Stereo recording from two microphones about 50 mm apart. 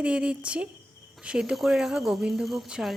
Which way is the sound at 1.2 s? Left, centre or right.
Centre.